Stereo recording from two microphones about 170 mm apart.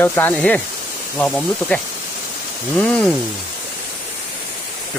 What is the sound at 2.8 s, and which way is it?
Speech, 5° left (ahead or behind).